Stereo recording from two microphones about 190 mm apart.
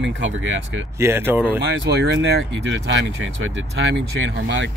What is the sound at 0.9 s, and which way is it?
Speech, 15° right (ahead or behind).